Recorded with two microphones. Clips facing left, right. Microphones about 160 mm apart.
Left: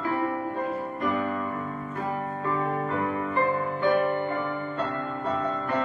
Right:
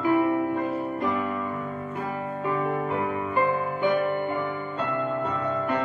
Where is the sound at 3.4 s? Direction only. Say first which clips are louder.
Right 2 dB; 15° right (ahead or behind).